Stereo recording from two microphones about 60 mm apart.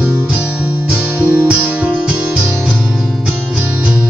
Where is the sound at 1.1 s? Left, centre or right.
Right.